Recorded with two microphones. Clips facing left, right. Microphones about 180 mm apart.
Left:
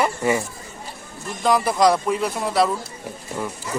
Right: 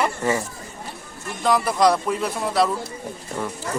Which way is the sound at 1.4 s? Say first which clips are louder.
Left 1 dB; centre (ahead or behind).